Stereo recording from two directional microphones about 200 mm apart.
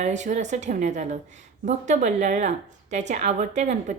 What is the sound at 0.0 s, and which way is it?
A woman's voice, 35° right (ahead or behind).